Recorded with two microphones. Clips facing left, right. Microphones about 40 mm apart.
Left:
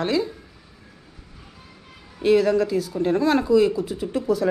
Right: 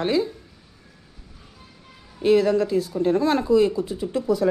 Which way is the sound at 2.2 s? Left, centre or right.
Left.